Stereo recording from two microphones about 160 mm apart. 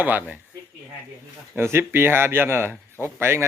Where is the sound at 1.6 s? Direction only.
15° right (ahead or behind).